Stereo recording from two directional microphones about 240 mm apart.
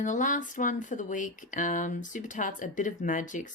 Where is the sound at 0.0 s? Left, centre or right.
Left.